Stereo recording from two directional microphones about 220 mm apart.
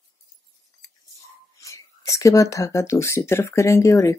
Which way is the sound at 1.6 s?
15° left (ahead or behind).